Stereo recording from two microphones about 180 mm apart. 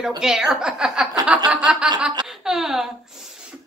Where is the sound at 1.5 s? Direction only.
5° right (ahead or behind).